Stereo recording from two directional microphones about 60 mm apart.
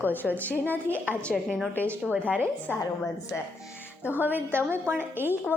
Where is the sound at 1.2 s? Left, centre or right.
Centre.